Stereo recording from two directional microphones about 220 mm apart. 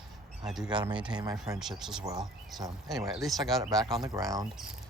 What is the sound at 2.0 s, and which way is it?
Speech, 15° right (ahead or behind).